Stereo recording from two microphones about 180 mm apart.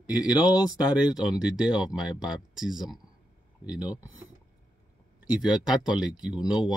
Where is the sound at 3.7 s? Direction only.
20° left (ahead or behind).